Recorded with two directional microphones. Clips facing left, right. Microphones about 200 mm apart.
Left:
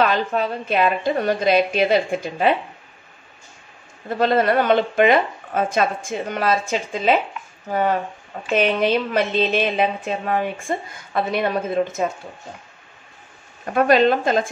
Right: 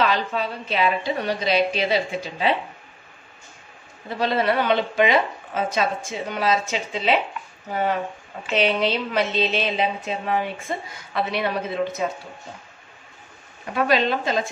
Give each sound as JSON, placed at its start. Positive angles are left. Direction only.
{"t": 0.0, "sound": "a woman's voice", "side_deg": 50}
{"t": 4.1, "sound": "a woman's voice", "side_deg": 50}
{"t": 8.5, "sound": "a woman's voice", "side_deg": 50}
{"t": 13.7, "sound": "a woman's voice", "side_deg": 50}